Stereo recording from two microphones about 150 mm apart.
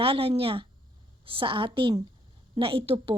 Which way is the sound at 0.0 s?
40° right (ahead or behind).